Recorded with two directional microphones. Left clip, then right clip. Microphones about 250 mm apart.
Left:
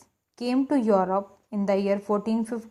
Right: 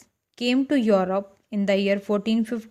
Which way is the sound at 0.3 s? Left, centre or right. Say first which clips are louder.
Right 2 dB; right.